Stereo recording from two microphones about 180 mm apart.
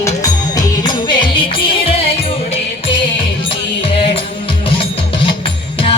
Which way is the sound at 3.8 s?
30° left (ahead or behind).